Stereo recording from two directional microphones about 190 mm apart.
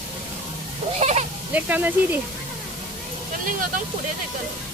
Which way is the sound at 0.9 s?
35° right (ahead or behind).